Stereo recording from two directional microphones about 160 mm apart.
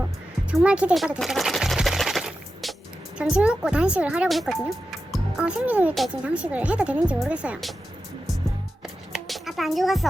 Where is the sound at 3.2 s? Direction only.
5° right (ahead or behind).